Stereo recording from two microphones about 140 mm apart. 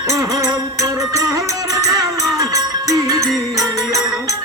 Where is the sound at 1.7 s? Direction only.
25° right (ahead or behind).